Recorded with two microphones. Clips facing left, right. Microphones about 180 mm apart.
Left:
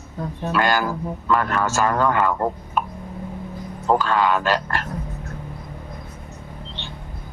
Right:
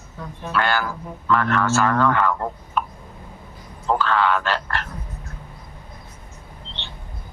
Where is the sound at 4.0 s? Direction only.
10° left (ahead or behind).